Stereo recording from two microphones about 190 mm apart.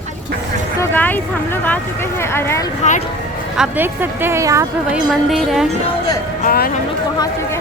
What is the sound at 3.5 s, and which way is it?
Speech, 10° right (ahead or behind).